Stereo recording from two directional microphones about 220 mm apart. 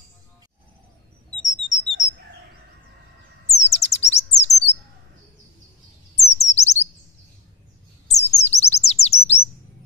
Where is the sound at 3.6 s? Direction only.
30° left (ahead or behind).